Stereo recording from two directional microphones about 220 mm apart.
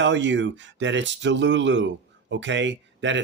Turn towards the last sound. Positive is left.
turn(degrees=-55)  # may be behind; listen again after turning